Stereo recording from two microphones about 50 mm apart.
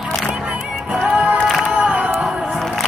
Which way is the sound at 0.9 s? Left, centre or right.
Centre.